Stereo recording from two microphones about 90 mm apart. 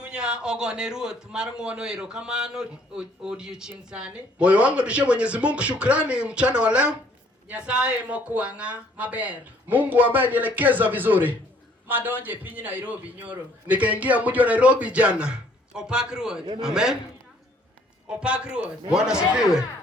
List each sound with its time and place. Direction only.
0.0 s a man's voice: 10° right (ahead or behind)
18.1 s a man's voice: 10° right (ahead or behind)